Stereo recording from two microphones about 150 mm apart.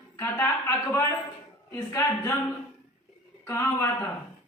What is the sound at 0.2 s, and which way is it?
A man's voice, 15° left (ahead or behind).